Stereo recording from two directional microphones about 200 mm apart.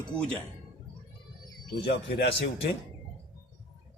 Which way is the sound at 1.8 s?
55° left (ahead or behind).